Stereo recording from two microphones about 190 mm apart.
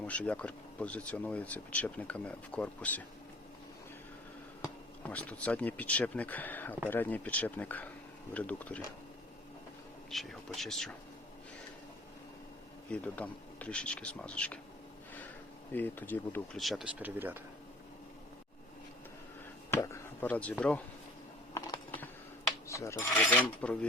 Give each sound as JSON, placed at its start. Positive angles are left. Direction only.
{"t": 0.0, "sound": "speech", "side_deg": 5}
{"t": 5.0, "sound": "speech", "side_deg": 10}
{"t": 10.1, "sound": "speech", "side_deg": 0}
{"t": 12.9, "sound": "speech", "side_deg": 5}
{"t": 15.7, "sound": "speech", "side_deg": 10}
{"t": 16.6, "sound": "speech", "side_deg": 0}
{"t": 19.7, "sound": "chop", "side_deg": 15}
{"t": 21.5, "sound": "a sound", "side_deg": 20}
{"t": 22.6, "sound": "speech", "side_deg": 15}